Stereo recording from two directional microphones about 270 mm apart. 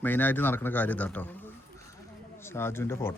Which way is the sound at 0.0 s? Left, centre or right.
Centre.